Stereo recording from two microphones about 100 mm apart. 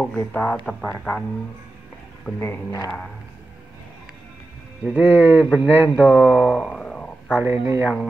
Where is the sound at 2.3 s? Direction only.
25° left (ahead or behind).